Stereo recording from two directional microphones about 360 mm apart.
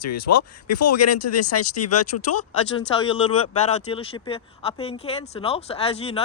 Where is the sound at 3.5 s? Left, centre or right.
Centre.